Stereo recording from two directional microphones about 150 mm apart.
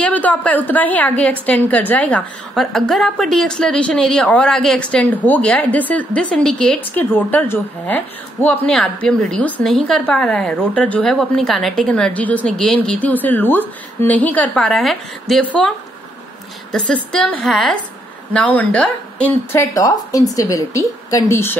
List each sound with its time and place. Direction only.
0.0 s a woman's voice: 10° left (ahead or behind)
16.7 s a woman's voice: 5° left (ahead or behind)
19.5 s speech: 20° left (ahead or behind)